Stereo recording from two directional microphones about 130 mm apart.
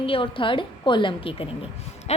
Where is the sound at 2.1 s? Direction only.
55° left (ahead or behind).